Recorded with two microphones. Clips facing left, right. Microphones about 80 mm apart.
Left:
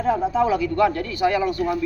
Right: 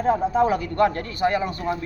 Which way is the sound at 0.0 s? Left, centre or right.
Right.